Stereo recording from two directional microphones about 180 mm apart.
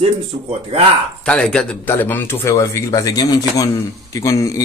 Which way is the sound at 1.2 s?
5° left (ahead or behind).